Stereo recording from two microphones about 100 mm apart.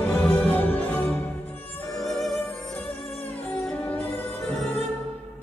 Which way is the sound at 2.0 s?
Centre (ahead or behind).